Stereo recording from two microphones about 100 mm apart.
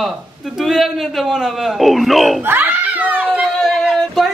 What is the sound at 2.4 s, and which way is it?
Music, 20° right (ahead or behind).